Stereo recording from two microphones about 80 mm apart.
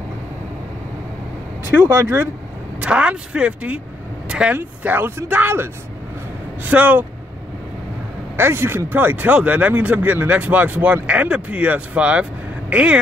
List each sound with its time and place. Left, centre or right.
1.8 s speech: right
4.6 s speech: right
8.4 s speech: right; by 13.0 s centre